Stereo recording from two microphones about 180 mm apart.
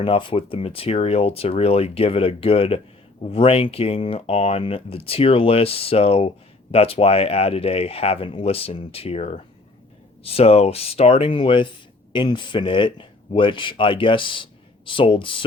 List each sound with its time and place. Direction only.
0.0 s speech: 30° left (ahead or behind)